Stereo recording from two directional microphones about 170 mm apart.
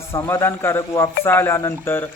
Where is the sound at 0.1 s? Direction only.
15° left (ahead or behind).